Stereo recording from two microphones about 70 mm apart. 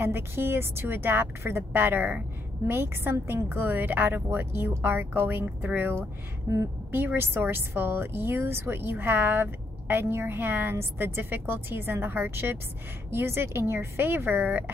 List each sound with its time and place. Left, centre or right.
0.0 s speech: right
6.5 s a woman's voice: right
6.9 s speech: right